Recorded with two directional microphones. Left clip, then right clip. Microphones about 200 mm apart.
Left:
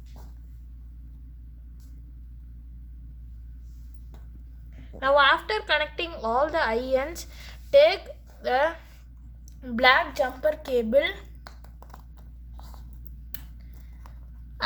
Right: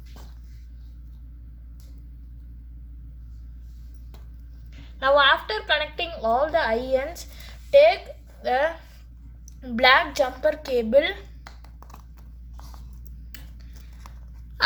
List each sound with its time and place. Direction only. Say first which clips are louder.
4.9 s a woman's voice: right 2 dB; 5° left (ahead or behind)
9.5 s a sound: right 1 dB; 20° left (ahead or behind)
9.8 s a woman's voice: right 2 dB; centre (ahead or behind)